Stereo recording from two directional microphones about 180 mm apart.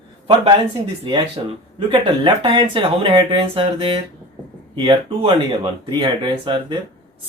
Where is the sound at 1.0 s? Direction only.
30° right (ahead or behind).